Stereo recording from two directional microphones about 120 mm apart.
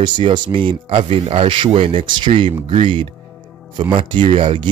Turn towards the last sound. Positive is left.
turn(degrees=-45)  # may be behind; listen again after turning